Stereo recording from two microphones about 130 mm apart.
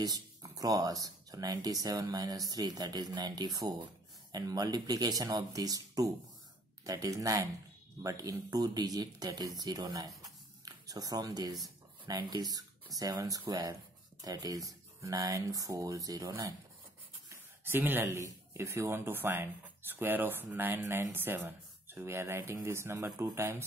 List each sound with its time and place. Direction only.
0.0 s speech: 30° right (ahead or behind)
17.6 s speech: 15° right (ahead or behind)